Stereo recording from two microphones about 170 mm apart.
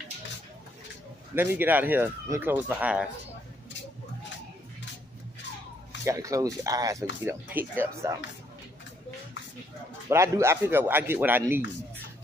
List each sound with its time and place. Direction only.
1.3 s speech: 15° right (ahead or behind)
6.0 s speech: 20° right (ahead or behind)
10.0 s speech: 15° right (ahead or behind)